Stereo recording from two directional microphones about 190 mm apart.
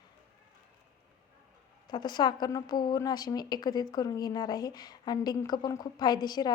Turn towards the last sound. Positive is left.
turn(degrees=20)  # may be behind; listen again after turning